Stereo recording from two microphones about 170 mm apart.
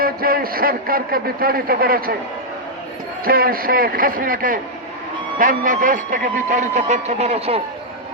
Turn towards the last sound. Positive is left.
turn(degrees=-35)  # may be behind; listen again after turning